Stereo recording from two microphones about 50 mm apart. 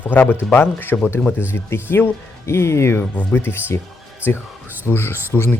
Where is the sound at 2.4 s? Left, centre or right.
Left.